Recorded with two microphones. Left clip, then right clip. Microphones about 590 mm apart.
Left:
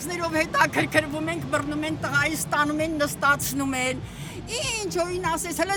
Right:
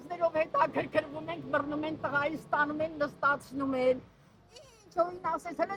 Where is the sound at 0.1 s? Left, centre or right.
Left.